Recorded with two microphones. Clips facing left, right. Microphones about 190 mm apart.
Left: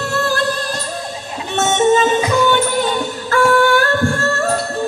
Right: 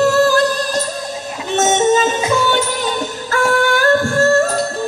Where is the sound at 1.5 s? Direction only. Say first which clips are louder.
Even; 40° right (ahead or behind).